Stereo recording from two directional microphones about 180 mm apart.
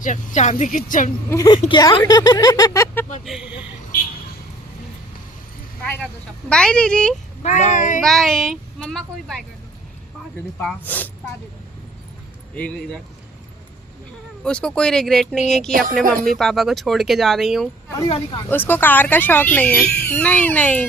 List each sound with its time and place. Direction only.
0.0 s speech: 45° left (ahead or behind)
1.3 s speech: 15° left (ahead or behind)
3.2 s speech: 5° right (ahead or behind)
6.5 s speech: 5° left (ahead or behind)
7.4 s speech: 45° left (ahead or behind)
8.0 s speech: centre (ahead or behind)
10.6 s speech: 5° left (ahead or behind)
12.5 s speech: 5° left (ahead or behind)
14.4 s speech: 5° left (ahead or behind)
15.7 s speech: 50° right (ahead or behind)
16.4 s speech: centre (ahead or behind)
18.4 s speech: 10° left (ahead or behind)